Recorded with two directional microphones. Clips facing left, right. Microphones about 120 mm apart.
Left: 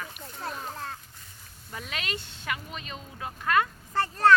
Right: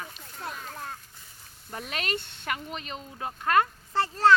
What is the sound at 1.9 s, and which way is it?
Speech, 45° right (ahead or behind).